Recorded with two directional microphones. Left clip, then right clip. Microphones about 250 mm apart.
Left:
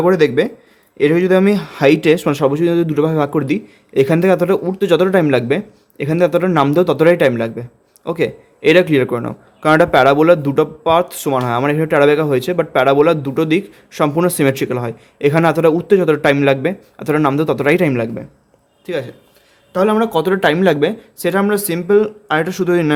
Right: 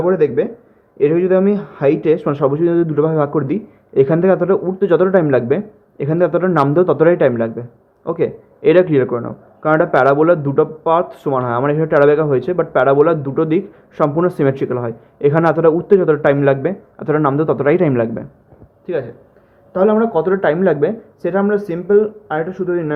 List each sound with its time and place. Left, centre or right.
0.0 s a man's voice: left